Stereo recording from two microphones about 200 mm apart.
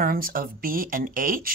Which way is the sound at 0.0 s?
45° right (ahead or behind).